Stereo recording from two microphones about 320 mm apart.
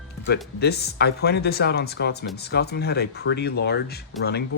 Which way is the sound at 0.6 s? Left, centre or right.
Left.